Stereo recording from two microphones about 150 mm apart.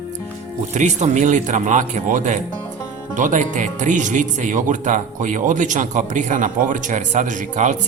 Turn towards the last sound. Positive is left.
turn(degrees=-55)  # may be behind; listen again after turning